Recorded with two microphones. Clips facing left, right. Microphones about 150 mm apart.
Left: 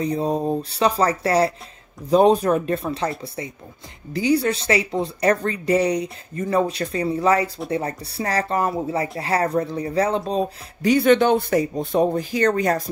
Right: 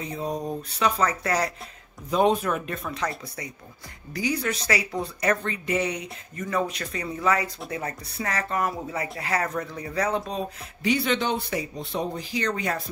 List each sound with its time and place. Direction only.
0.0 s a woman's voice: 35° left (ahead or behind)
10.8 s speech: 45° left (ahead or behind)